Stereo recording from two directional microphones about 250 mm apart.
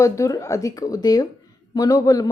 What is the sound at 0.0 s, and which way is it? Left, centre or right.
A woman's voice, centre.